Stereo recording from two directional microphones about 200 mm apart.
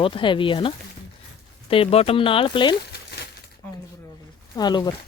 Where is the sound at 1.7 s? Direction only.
30° left (ahead or behind).